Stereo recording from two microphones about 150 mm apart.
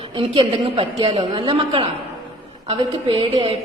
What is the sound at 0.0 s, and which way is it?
A woman's voice, 35° right (ahead or behind).